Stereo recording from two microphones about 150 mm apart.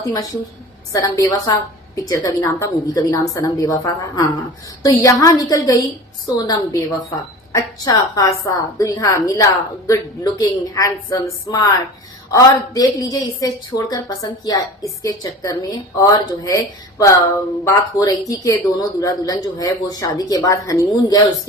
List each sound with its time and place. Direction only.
0.0 s a woman's voice: 25° left (ahead or behind)